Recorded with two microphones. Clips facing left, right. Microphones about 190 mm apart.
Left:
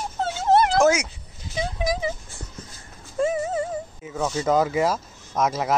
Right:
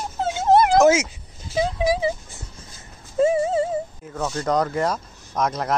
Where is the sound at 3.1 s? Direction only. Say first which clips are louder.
Right 5 dB; 25° right (ahead or behind).